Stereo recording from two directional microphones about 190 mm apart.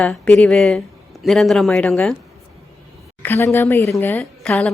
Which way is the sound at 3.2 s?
15° left (ahead or behind).